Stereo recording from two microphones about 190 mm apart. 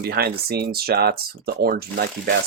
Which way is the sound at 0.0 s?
55° right (ahead or behind).